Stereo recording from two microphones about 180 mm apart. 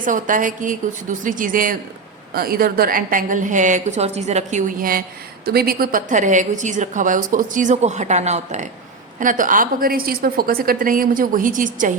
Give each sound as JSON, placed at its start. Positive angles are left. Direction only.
{"t": 0.0, "sound": "a woman's voice", "side_deg": -45}